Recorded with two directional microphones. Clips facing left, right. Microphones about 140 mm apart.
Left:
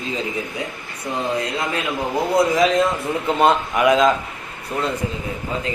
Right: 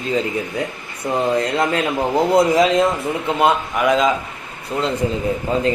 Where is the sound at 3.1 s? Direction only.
20° right (ahead or behind).